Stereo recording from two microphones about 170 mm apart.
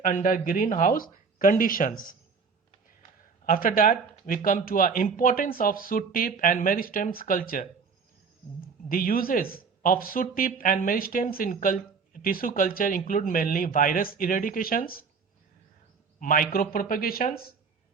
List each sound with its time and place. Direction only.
0.0 s speech: 50° left (ahead or behind)
3.4 s speech: 55° left (ahead or behind)
8.9 s speech: 55° left (ahead or behind)
16.2 s speech: 55° left (ahead or behind)